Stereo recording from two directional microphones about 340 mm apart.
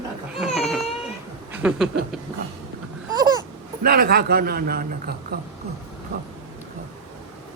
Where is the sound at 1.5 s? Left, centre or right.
Centre.